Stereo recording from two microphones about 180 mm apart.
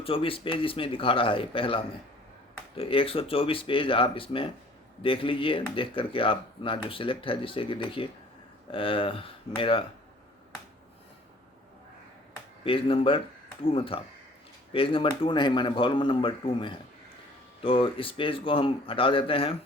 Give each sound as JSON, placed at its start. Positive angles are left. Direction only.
{"t": 0.0, "sound": "speech", "side_deg": 30}
{"t": 12.6, "sound": "speech", "side_deg": 30}